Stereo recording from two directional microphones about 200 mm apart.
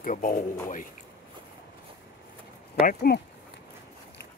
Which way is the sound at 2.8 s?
50° left (ahead or behind).